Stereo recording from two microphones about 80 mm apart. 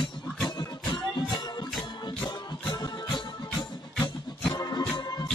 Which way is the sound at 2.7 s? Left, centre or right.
Left.